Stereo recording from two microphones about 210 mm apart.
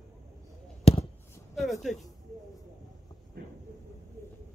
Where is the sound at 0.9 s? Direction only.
30° left (ahead or behind).